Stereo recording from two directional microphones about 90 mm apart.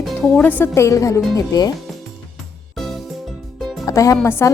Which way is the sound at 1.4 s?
45° left (ahead or behind).